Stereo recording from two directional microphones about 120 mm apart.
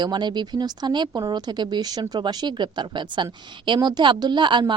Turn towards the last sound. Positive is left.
turn(degrees=-40)  # may be behind; listen again after turning